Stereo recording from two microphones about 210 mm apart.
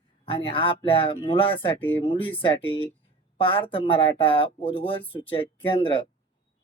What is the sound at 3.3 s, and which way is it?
Speech, 25° left (ahead or behind).